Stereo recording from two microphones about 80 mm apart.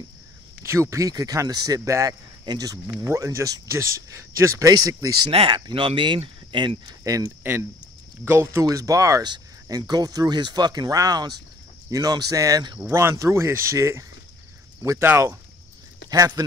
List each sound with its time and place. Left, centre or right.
0.6 s speech: right
3.1 s speech: right
5.2 s speech: right
7.0 s speech: right
8.3 s speech: right
9.7 s speech: right
12.9 s speech: right
16.4 s speech: right